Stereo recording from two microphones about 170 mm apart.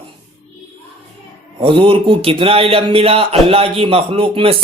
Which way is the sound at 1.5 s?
30° right (ahead or behind).